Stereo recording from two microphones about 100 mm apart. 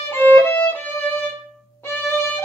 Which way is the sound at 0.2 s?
20° left (ahead or behind).